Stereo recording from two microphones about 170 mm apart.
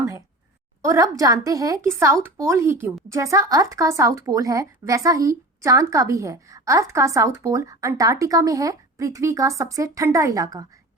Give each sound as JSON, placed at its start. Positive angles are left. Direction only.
{"t": 0.8, "sound": "a woman's voice", "side_deg": -20}